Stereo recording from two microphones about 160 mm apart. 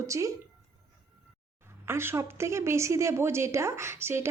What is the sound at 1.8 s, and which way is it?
A woman's voice, 15° right (ahead or behind).